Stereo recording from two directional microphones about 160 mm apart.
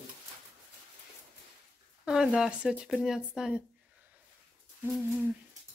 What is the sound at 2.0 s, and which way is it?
Speech, 5° right (ahead or behind).